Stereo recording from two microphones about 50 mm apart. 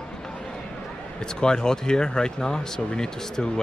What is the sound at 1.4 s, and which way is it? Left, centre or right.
Speech, centre.